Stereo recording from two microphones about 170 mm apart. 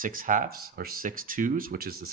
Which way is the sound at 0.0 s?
55° right (ahead or behind).